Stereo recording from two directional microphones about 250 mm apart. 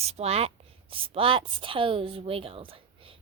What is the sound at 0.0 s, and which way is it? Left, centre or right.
A woman's voice, right.